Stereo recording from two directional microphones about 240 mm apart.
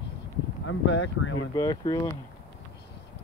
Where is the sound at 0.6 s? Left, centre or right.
Left.